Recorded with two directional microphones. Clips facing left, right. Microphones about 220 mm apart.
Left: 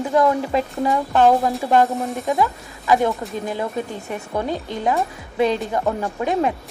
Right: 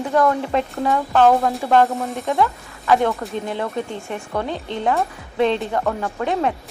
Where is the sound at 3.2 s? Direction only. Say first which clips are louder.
Even; 5° left (ahead or behind).